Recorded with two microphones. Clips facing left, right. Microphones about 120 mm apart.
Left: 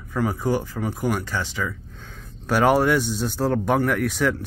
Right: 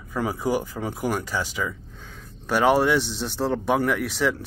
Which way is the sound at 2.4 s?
Centre (ahead or behind).